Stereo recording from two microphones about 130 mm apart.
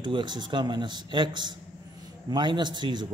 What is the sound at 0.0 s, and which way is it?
Speech, 35° right (ahead or behind).